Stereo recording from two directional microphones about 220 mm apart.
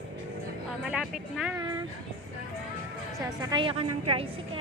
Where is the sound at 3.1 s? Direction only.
20° right (ahead or behind).